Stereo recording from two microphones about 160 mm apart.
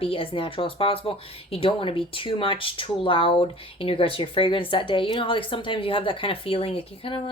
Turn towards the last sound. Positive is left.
turn(degrees=35)  # may be behind; listen again after turning